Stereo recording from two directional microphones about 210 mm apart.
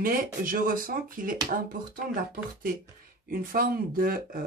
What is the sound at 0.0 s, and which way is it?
Speech, 40° right (ahead or behind).